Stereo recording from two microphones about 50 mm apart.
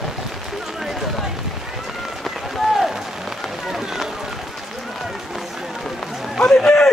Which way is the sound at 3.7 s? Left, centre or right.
Centre.